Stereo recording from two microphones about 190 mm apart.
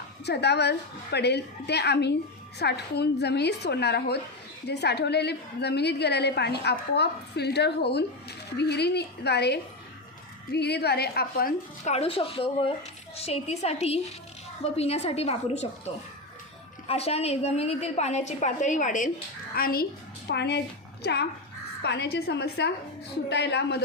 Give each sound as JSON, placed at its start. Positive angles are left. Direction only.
{"t": 0.3, "sound": "a woman's voice", "side_deg": 60}
{"t": 11.9, "sound": "a woman's voice", "side_deg": 30}